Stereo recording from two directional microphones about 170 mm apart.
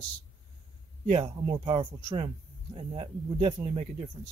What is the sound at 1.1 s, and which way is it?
Speech, 30° right (ahead or behind).